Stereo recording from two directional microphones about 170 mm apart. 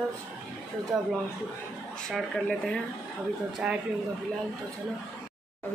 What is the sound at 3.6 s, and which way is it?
Speech, 5° right (ahead or behind).